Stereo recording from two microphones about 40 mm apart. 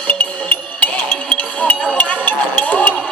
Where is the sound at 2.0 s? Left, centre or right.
Left.